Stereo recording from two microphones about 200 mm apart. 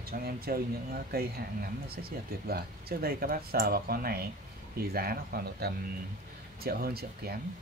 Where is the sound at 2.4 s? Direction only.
50° right (ahead or behind).